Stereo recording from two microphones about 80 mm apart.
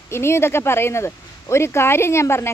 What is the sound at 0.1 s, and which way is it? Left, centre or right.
Speech, left.